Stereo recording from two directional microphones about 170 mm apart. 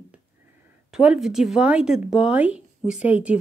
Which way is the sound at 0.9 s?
5° right (ahead or behind).